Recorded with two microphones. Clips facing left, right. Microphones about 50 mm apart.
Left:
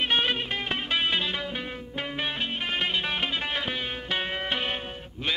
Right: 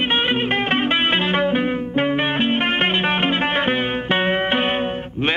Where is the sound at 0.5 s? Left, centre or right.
Right.